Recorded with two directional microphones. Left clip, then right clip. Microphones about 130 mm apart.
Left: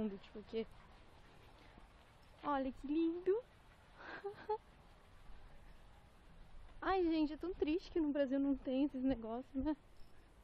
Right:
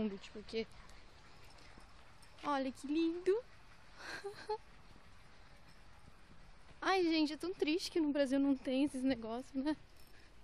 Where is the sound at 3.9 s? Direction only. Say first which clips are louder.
Right 2 dB; 5° left (ahead or behind).